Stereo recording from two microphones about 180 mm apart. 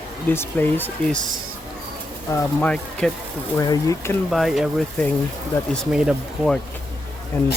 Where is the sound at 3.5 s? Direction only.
20° left (ahead or behind).